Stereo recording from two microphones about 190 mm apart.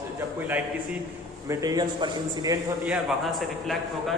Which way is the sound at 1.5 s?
20° right (ahead or behind).